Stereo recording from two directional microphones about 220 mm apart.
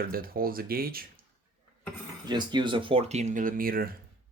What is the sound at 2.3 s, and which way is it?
Speech, 20° right (ahead or behind).